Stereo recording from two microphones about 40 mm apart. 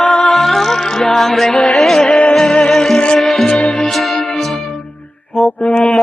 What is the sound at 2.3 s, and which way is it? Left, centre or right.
Music, centre.